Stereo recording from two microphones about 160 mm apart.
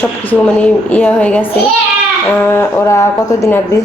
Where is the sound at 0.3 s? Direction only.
10° left (ahead or behind).